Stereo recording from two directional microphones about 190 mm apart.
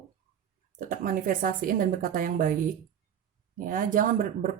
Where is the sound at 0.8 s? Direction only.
45° right (ahead or behind).